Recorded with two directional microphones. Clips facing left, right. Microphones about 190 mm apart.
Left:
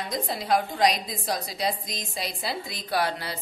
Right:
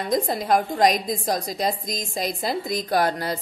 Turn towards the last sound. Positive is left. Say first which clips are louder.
# right 5 dB
turn(degrees=-45)  # may be behind; listen again after turning